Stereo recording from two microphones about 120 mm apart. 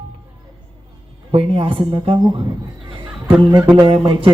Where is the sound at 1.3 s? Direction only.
50° right (ahead or behind).